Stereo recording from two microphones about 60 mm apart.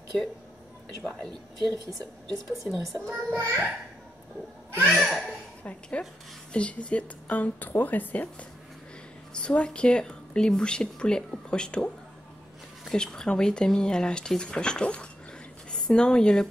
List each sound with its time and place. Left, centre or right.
1.0 s speech: centre
1.9 s a woman's voice: right
2.6 s a child's voice: centre
4.9 s a child's voice: centre
5.6 s a woman's voice: left